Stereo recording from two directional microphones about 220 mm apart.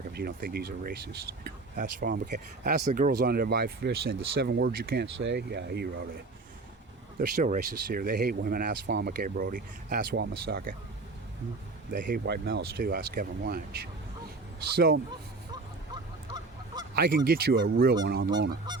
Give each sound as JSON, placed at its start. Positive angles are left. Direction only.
{"t": 0.1, "sound": "speech", "side_deg": -45}
{"t": 7.2, "sound": "speech", "side_deg": -40}
{"t": 11.9, "sound": "speech", "side_deg": -40}
{"t": 14.6, "sound": "speech", "side_deg": -45}
{"t": 16.9, "sound": "speech", "side_deg": -45}
{"t": 18.7, "sound": "goose", "side_deg": -20}